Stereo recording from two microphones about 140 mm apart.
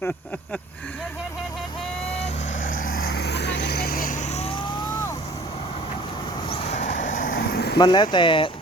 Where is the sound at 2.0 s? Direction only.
50° left (ahead or behind); by 5.5 s 25° left (ahead or behind).